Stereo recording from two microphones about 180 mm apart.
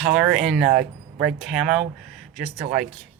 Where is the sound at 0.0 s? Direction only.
5° right (ahead or behind).